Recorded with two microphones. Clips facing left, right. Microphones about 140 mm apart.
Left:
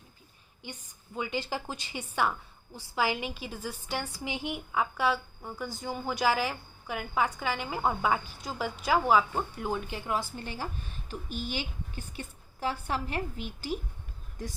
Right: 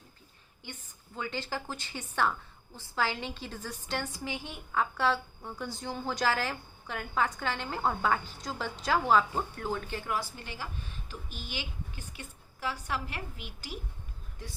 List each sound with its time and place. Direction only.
0.6 s a woman's voice: 15° left (ahead or behind)
11.4 s a woman's voice: 35° left (ahead or behind)